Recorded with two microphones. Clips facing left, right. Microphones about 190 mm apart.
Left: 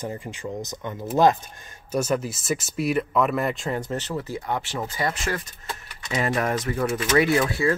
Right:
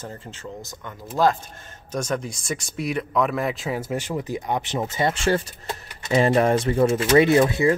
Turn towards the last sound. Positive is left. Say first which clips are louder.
# right 4 dB
turn(degrees=-20)  # may be behind; listen again after turning